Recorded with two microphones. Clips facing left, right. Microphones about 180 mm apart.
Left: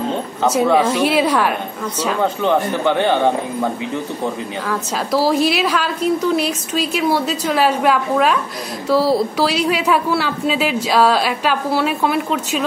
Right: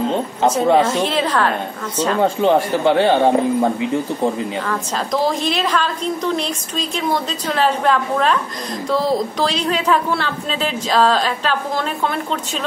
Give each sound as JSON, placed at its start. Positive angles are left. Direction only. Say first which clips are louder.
{"t": 0.7, "sound": "speech", "louder": "left 1 dB", "side_deg": 10}
{"t": 2.2, "sound": "speech", "louder": "right 2 dB", "side_deg": -25}
{"t": 4.6, "sound": "speech", "louder": "left 1 dB", "side_deg": 5}